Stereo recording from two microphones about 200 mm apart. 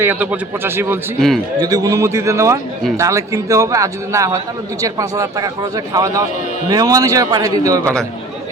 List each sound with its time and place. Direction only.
0.0 s speech: 10° right (ahead or behind)